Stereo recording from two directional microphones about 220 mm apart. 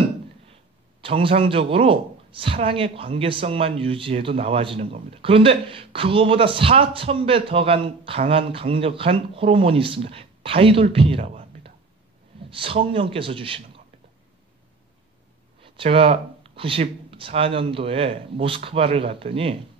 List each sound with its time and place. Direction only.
1.0 s speech: 25° right (ahead or behind)
15.6 s speech: 25° right (ahead or behind)